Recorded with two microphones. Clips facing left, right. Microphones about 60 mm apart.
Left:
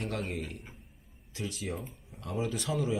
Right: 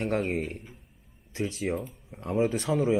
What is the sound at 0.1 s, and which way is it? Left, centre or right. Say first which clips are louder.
Speech: right 8 dB; right.